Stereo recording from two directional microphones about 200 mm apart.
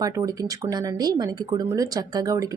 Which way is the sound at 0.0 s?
20° right (ahead or behind).